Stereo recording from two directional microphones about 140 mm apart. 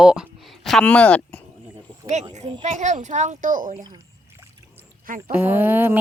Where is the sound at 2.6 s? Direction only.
55° right (ahead or behind); by 3.7 s 70° right (ahead or behind).